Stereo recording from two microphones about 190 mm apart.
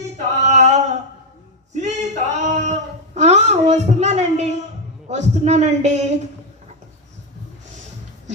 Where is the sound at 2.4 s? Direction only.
40° right (ahead or behind).